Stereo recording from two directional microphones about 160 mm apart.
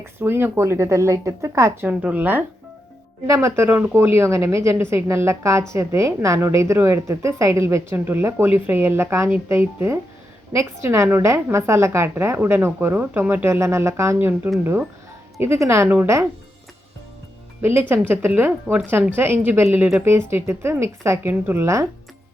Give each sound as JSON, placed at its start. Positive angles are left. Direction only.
{"t": 0.0, "sound": "a woman's voice", "side_deg": -15}
{"t": 17.6, "sound": "a woman's voice", "side_deg": -15}